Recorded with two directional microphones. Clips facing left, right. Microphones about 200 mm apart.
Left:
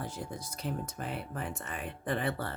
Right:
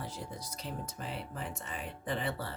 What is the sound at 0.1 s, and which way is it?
Speech, 50° left (ahead or behind).